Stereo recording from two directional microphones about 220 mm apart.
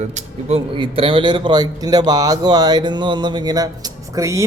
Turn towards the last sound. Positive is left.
turn(degrees=-15)  # may be behind; listen again after turning